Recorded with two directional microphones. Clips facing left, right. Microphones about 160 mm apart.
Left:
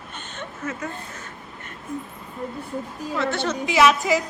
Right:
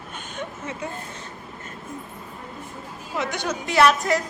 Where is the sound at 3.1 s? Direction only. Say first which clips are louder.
Left 2 dB; 15° right (ahead or behind).